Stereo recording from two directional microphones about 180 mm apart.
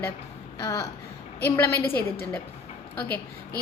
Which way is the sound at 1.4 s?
15° left (ahead or behind).